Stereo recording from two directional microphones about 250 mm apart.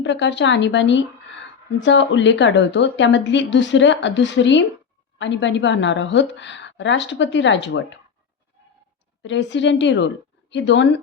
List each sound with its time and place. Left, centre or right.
0.0 s speech: left
9.2 s speech: left